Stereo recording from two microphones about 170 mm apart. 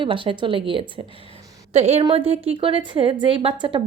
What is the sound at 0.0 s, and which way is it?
Speech, 30° right (ahead or behind).